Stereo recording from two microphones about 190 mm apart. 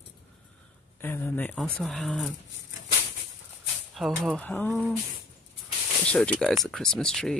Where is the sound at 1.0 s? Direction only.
10° left (ahead or behind).